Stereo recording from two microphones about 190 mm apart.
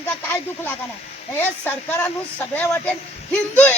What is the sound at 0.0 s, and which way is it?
Speech, 10° left (ahead or behind).